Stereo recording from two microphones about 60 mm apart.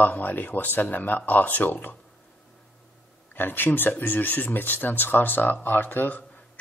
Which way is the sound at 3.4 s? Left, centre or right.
Left.